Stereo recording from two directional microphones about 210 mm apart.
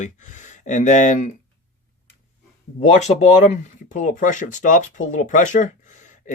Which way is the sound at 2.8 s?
35° left (ahead or behind).